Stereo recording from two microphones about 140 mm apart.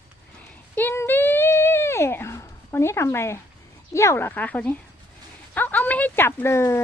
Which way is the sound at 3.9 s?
20° left (ahead or behind).